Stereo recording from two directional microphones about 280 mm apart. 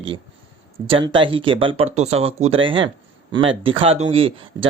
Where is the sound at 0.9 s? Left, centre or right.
Centre.